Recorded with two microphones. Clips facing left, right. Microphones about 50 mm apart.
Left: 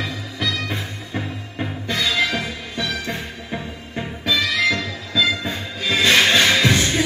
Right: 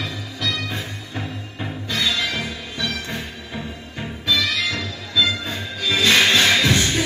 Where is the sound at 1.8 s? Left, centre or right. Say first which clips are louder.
Left 2 dB; left.